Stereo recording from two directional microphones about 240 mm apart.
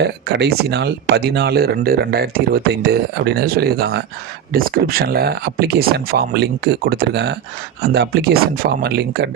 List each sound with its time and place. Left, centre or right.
0.0 s speech: right